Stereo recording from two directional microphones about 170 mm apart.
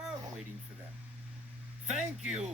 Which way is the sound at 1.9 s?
5° right (ahead or behind).